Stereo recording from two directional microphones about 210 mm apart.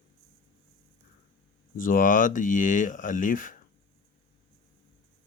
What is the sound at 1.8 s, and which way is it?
Speech, 40° left (ahead or behind).